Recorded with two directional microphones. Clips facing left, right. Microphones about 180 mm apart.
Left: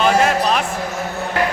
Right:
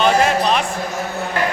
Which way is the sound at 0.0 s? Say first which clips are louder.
Even; centre (ahead or behind).